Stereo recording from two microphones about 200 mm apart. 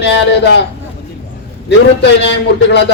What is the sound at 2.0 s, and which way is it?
Speech, 60° left (ahead or behind).